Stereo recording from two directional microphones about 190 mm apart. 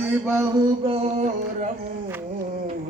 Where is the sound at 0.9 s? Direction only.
35° right (ahead or behind).